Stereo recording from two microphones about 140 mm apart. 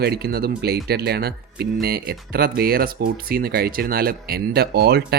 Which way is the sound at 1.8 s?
90° right.